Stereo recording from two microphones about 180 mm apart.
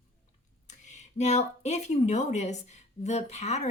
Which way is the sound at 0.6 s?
40° left (ahead or behind).